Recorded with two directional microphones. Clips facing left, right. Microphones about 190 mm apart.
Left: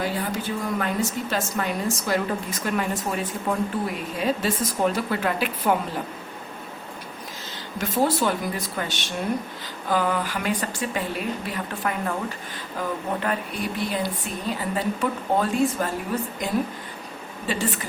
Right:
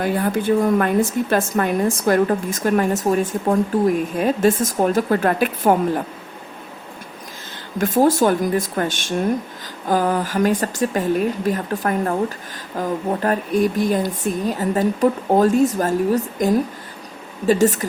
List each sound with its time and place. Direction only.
0.0 s a woman's voice: 55° right (ahead or behind)
7.8 s a woman's voice: 50° right (ahead or behind)